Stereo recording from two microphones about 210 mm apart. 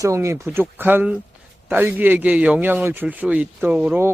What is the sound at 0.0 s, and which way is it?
A man's voice, 15° right (ahead or behind).